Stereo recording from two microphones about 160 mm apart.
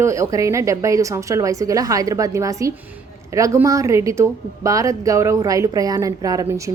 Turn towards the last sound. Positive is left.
turn(degrees=-20)  # may be behind; listen again after turning